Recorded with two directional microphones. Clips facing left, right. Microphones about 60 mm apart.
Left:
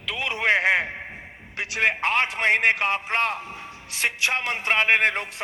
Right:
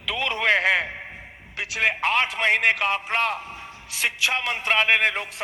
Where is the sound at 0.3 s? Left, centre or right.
Centre.